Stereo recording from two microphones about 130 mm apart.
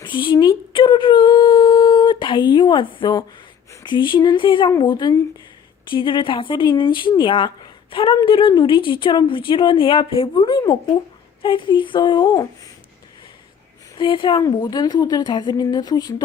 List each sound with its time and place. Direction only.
0.0 s busy signal: 40° left (ahead or behind)
3.8 s speech: 35° left (ahead or behind)
13.9 s speech: 40° left (ahead or behind)